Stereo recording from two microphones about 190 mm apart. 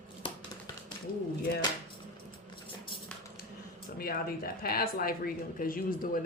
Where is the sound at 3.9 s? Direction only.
55° left (ahead or behind).